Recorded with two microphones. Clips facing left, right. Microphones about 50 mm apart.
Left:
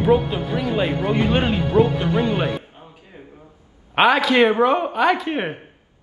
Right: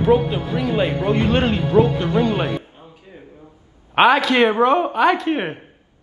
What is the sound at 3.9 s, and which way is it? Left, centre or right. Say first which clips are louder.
A man's voice: right 2 dB; centre.